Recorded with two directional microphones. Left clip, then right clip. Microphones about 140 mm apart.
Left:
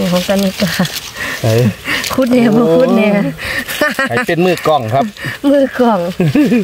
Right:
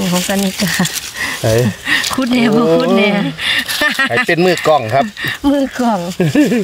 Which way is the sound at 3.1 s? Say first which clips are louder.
Right 1 dB; 90° left.